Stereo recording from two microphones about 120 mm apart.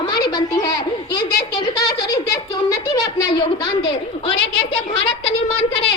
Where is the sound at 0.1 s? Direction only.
35° left (ahead or behind).